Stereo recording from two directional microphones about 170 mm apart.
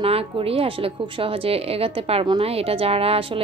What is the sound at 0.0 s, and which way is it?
A woman's voice, 35° right (ahead or behind).